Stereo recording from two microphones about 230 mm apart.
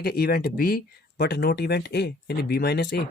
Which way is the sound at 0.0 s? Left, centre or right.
Left.